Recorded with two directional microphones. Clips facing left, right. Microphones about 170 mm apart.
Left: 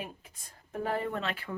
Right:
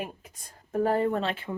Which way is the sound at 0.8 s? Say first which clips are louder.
Right 7 dB; 40° right (ahead or behind).